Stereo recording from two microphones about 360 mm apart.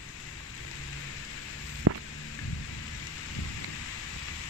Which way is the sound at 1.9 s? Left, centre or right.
Right.